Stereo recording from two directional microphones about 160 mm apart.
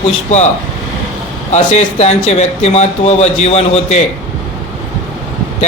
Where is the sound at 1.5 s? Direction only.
45° left (ahead or behind).